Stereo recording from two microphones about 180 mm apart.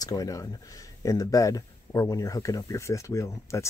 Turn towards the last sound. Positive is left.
turn(degrees=15)  # may be behind; listen again after turning